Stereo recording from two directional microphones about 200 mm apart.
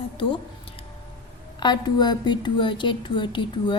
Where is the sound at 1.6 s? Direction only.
20° left (ahead or behind).